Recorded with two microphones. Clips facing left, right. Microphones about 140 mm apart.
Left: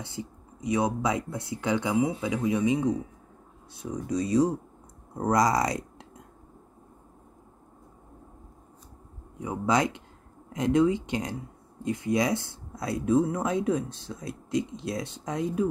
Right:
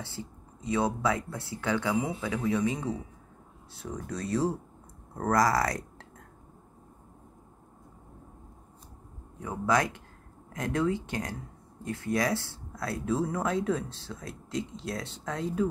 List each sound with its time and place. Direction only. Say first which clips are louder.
0.0 s speech: left 3 dB; 15° left (ahead or behind)
9.4 s speech: left 2 dB; 15° left (ahead or behind)